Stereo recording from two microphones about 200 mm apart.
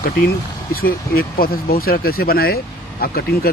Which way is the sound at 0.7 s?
45° left (ahead or behind).